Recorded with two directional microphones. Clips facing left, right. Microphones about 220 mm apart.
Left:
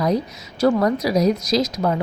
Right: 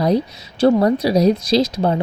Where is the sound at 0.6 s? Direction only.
30° right (ahead or behind).